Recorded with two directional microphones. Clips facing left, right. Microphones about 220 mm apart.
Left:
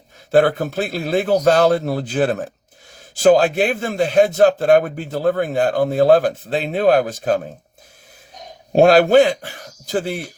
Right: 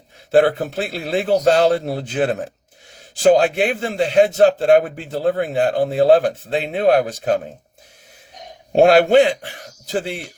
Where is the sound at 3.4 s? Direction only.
40° left (ahead or behind).